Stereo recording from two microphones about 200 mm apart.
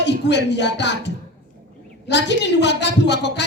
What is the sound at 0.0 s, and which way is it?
A woman's voice, 60° left (ahead or behind).